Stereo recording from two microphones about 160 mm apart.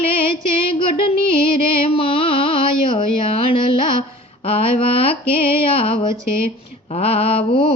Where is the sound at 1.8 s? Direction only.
35° left (ahead or behind).